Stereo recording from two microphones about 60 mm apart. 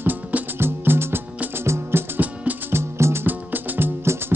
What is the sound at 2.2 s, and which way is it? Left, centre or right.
Music, right.